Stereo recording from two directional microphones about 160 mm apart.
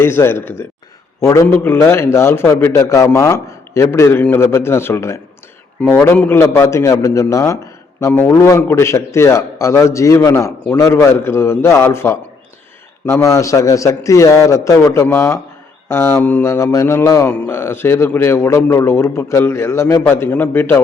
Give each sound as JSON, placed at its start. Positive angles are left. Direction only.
{"t": 0.0, "sound": "a man's voice", "side_deg": 15}